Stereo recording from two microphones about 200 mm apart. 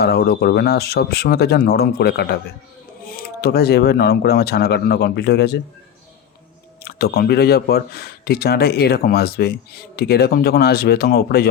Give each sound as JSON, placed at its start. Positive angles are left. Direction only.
{"t": 0.0, "sound": "speech", "side_deg": 55}
{"t": 6.8, "sound": "speech", "side_deg": 50}